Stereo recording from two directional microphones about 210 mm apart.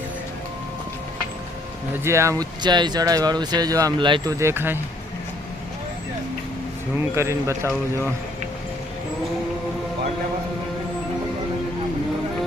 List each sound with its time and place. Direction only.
2.0 s speech: 15° right (ahead or behind)
7.2 s speech: 15° right (ahead or behind)